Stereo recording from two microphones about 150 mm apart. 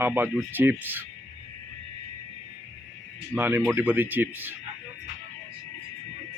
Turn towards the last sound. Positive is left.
turn(degrees=-15)  # may be behind; listen again after turning